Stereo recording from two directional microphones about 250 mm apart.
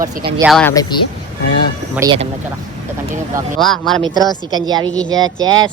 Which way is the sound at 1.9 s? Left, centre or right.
Centre.